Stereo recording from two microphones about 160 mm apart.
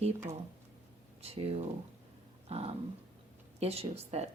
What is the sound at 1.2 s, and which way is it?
Speech, 40° right (ahead or behind).